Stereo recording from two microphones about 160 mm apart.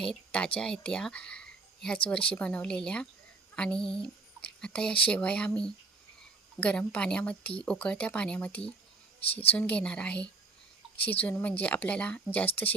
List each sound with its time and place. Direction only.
0.0 s a woman's voice: 5° left (ahead or behind)
3.5 s a sound: 5° left (ahead or behind)
4.6 s a woman's voice: 5° left (ahead or behind)
6.6 s a woman's voice: 10° left (ahead or behind)
9.2 s a woman's voice: 35° left (ahead or behind)
9.6 s a woman's voice: 5° left (ahead or behind)